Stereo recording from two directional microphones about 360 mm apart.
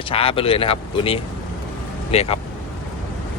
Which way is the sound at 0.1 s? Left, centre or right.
Centre.